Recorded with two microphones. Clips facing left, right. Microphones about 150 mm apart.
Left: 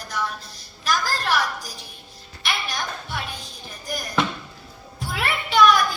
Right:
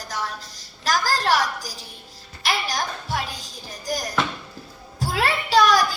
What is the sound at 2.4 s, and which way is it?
Music, 40° right (ahead or behind).